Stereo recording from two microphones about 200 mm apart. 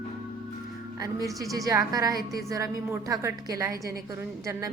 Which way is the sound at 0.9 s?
15° right (ahead or behind).